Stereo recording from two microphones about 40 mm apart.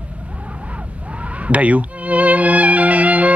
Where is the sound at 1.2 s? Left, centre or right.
Right.